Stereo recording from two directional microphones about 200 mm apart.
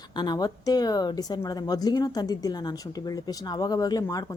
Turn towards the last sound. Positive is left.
turn(degrees=20)  # may be behind; listen again after turning